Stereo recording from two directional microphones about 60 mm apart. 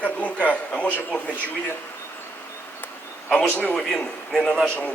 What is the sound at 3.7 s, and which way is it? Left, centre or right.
Speech, centre.